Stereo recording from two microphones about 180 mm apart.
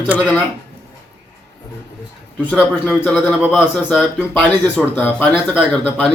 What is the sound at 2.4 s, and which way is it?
A man's voice, 5° left (ahead or behind).